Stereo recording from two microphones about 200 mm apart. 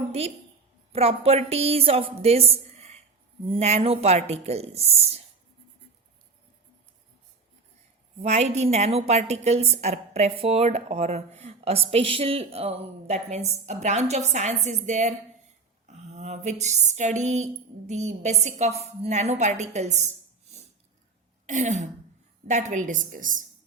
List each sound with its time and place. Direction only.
0.1 s a woman's voice: 30° right (ahead or behind)
8.2 s a woman's voice: 35° right (ahead or behind)